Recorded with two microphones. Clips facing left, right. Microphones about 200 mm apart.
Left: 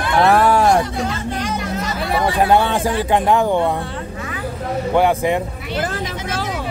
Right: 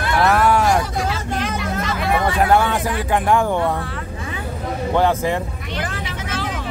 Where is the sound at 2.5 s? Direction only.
25° left (ahead or behind).